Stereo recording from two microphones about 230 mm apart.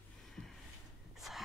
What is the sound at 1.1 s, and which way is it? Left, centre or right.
Snort, centre.